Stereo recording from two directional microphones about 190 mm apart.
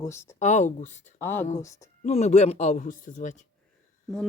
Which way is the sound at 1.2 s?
10° left (ahead or behind).